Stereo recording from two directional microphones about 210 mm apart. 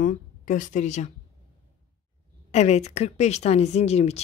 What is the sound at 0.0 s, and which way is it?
Speech, 40° left (ahead or behind).